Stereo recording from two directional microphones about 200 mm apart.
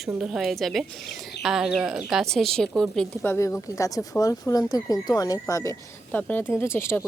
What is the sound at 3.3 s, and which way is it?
Speech, 15° left (ahead or behind).